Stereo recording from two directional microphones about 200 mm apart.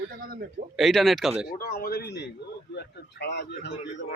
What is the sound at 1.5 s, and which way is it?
A man's voice, 45° left (ahead or behind).